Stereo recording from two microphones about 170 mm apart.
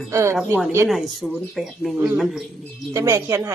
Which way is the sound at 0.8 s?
Centre (ahead or behind).